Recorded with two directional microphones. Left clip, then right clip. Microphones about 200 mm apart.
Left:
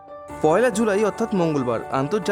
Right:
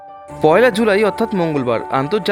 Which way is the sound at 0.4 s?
5° right (ahead or behind).